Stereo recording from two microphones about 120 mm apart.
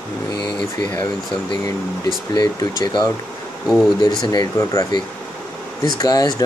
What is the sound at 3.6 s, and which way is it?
Speech, centre (ahead or behind).